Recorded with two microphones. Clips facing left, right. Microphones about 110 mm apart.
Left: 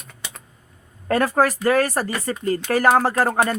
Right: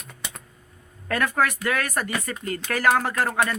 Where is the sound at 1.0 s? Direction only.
35° left (ahead or behind).